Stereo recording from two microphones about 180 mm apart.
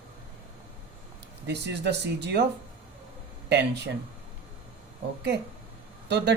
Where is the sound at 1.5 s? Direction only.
70° right (ahead or behind).